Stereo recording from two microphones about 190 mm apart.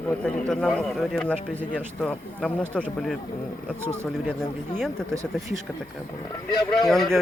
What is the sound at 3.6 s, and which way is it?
Speech, 10° right (ahead or behind).